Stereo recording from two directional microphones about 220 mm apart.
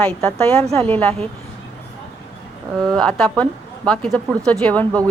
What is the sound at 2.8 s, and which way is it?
A woman's voice, centre (ahead or behind).